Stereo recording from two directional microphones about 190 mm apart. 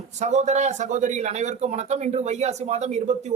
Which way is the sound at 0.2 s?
40° right (ahead or behind).